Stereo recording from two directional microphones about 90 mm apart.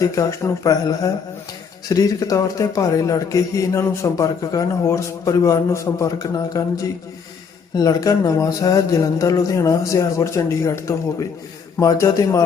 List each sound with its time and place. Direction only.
0.0 s speech: 35° left (ahead or behind)